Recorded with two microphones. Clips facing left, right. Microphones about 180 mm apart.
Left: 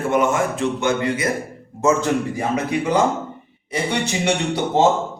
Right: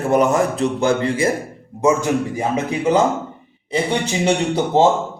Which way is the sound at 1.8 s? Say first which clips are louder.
Right 1 dB; 15° right (ahead or behind).